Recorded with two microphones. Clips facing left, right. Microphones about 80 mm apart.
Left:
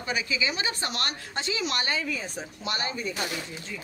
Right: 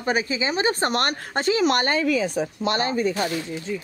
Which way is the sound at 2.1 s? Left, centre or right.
Right.